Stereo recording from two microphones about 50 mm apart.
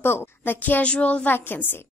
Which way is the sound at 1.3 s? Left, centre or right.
Left.